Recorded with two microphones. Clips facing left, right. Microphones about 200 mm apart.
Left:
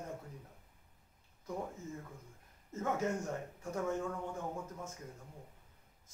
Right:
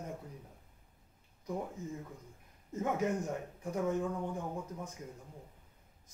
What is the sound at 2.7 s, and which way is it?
Speech, 15° right (ahead or behind).